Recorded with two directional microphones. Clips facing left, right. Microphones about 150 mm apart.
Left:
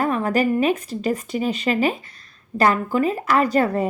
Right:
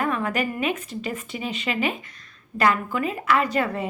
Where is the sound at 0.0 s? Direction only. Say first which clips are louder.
Left 5 dB; 35° left (ahead or behind).